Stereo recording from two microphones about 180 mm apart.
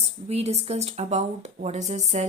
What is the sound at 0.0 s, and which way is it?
A woman's voice, 35° right (ahead or behind).